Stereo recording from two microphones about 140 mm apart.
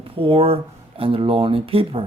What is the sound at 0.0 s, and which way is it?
Speech, 40° right (ahead or behind).